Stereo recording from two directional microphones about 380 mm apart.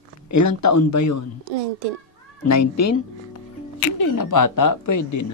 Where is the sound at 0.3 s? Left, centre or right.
Left.